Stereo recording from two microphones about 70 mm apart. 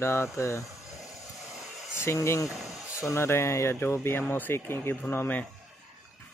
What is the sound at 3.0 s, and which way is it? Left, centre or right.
Speech, left.